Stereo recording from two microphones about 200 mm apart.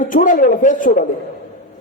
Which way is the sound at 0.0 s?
40° left (ahead or behind).